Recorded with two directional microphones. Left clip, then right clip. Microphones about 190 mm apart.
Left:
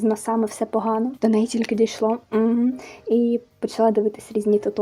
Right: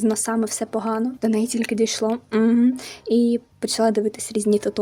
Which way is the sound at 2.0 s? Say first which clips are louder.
Even; 30° right (ahead or behind).